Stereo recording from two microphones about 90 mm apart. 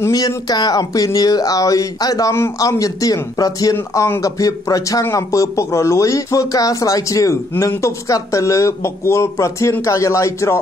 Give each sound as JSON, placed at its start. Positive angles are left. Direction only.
{"t": 0.5, "sound": "speech", "side_deg": 45}